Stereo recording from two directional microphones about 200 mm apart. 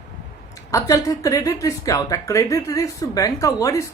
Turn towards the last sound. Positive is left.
turn(degrees=15)  # may be behind; listen again after turning